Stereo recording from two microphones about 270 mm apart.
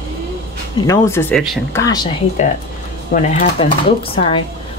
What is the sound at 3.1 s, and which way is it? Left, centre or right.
Speech, left.